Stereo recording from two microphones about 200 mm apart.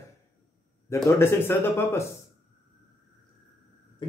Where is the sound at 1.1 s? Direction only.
10° left (ahead or behind).